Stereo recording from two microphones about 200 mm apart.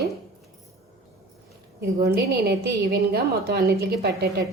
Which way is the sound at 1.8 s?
50° right (ahead or behind).